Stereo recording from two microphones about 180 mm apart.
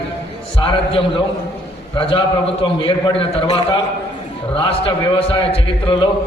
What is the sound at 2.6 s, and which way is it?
A man's voice, 30° left (ahead or behind).